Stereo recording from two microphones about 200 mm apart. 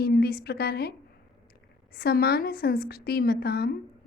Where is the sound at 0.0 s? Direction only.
50° left (ahead or behind).